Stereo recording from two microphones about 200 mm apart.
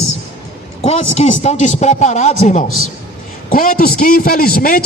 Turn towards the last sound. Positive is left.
turn(degrees=45)  # may be behind; listen again after turning